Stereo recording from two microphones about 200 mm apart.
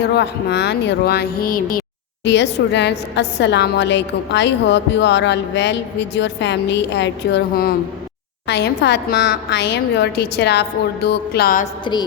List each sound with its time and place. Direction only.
0.0 s a woman's voice: 55° left (ahead or behind)
2.2 s a woman's voice: 60° left (ahead or behind)